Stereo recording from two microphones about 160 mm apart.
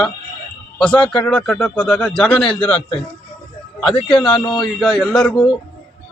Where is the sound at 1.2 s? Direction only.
5° left (ahead or behind).